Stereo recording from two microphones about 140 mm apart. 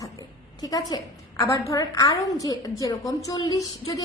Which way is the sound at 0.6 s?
25° left (ahead or behind).